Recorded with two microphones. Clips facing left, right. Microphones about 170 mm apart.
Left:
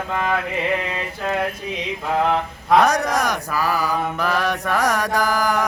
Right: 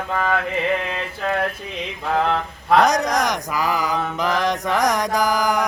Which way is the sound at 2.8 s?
20° right (ahead or behind).